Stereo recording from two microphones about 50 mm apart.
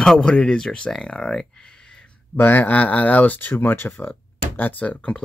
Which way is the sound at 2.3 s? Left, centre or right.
Left.